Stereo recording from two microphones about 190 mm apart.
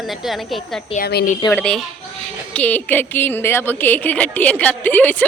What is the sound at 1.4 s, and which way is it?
A woman's voice, 10° left (ahead or behind).